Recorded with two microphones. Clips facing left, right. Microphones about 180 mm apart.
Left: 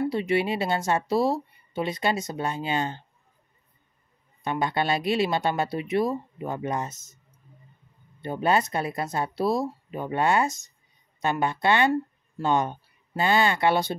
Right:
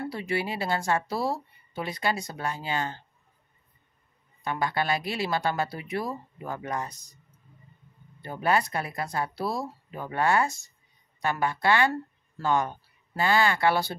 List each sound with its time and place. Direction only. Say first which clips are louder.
0.0 s speech: left 6 dB; 20° left (ahead or behind)
4.4 s speech: left 2 dB; 20° left (ahead or behind)
8.2 s speech: left 2 dB; 25° left (ahead or behind)